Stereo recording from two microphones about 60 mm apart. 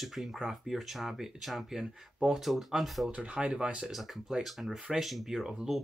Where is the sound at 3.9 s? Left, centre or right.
Centre.